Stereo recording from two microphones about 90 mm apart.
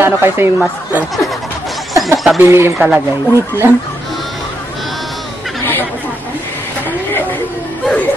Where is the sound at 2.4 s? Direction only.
25° right (ahead or behind).